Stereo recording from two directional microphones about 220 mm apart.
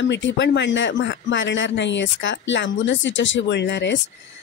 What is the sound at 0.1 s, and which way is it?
Speech, 55° left (ahead or behind).